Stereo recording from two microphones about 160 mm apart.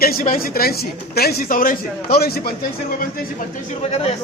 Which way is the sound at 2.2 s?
70° left (ahead or behind).